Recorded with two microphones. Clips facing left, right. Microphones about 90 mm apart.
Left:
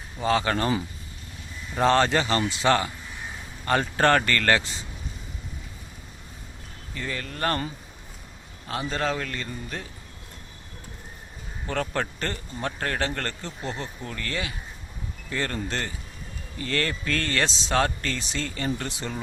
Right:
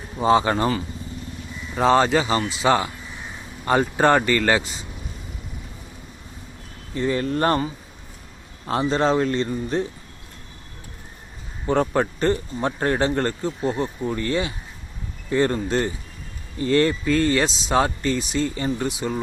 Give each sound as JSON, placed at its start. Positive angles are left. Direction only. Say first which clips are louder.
{"t": 0.2, "sound": "speech", "louder": "right 6 dB", "side_deg": -20}
{"t": 1.7, "sound": "speech", "louder": "right 3 dB", "side_deg": -5}
{"t": 3.7, "sound": "speech", "louder": "right 4 dB", "side_deg": -15}
{"t": 6.9, "sound": "speech", "louder": "right 11 dB", "side_deg": -25}
{"t": 8.6, "sound": "speech", "louder": "right 7 dB", "side_deg": -35}
{"t": 11.6, "sound": "speech", "louder": "right 8 dB", "side_deg": -20}